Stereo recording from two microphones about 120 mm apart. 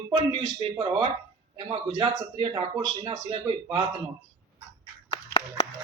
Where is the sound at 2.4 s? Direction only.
55° right (ahead or behind).